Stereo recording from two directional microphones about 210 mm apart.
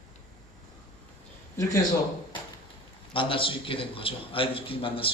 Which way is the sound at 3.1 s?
25° left (ahead or behind).